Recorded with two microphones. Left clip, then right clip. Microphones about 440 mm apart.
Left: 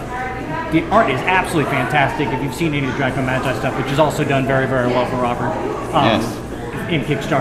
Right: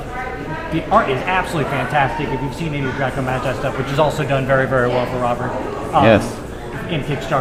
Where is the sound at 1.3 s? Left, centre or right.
Right.